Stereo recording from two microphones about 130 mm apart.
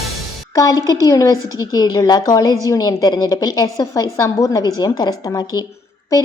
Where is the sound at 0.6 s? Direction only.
25° left (ahead or behind).